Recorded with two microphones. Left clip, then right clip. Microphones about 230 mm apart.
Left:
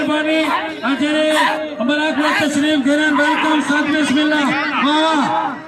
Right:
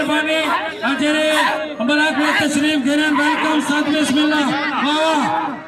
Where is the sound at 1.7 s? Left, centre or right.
Right.